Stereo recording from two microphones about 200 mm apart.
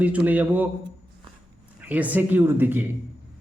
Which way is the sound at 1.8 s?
5° right (ahead or behind).